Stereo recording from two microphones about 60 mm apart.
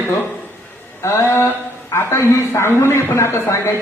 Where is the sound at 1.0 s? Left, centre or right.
Left.